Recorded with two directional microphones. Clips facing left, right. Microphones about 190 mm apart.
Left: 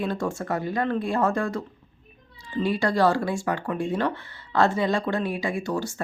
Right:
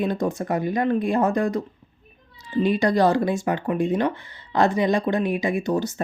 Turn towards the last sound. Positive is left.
turn(degrees=-20)  # may be behind; listen again after turning